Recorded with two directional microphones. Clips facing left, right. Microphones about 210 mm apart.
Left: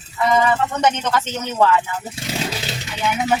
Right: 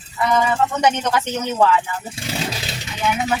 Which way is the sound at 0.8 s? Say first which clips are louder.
Even; 10° right (ahead or behind).